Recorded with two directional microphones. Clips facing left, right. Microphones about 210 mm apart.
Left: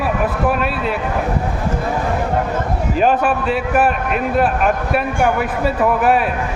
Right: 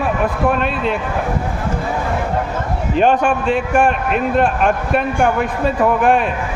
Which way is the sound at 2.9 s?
5° left (ahead or behind).